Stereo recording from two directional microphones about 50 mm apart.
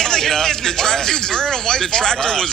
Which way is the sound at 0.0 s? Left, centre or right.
Centre.